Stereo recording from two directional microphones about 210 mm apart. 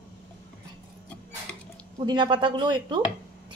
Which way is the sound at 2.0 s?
20° right (ahead or behind).